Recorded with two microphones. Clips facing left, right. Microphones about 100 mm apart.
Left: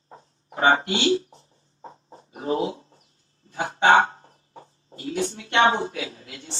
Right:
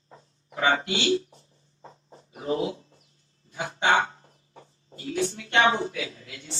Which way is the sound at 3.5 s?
50° left (ahead or behind).